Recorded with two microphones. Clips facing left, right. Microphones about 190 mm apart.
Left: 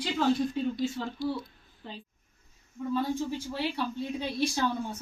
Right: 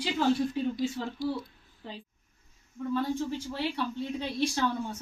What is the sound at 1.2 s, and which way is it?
Speech, 40° right (ahead or behind).